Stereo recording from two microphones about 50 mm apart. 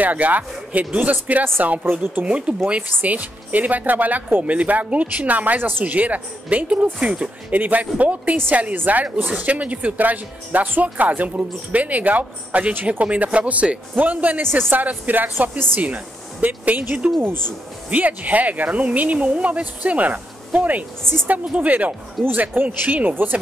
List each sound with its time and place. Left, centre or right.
0.0 s speech: right
3.0 s speech: right
5.9 s speech: right
17.2 s speech: right
17.8 s speech: right